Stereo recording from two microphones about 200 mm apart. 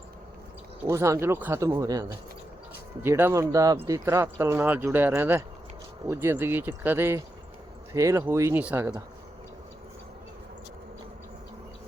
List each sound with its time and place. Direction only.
0.9 s speech: 15° right (ahead or behind)